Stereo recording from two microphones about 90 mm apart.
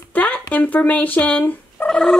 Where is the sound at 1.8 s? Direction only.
5° left (ahead or behind).